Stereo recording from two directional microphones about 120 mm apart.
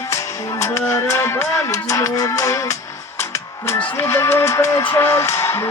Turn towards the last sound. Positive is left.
turn(degrees=20)  # may be behind; listen again after turning